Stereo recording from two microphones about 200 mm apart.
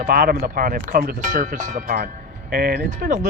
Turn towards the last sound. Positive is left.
turn(degrees=-50)  # may be behind; listen again after turning